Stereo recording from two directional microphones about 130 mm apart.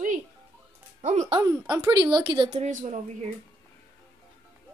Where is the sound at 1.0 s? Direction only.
65° right (ahead or behind).